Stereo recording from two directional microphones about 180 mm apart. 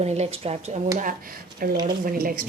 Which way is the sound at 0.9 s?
50° right (ahead or behind).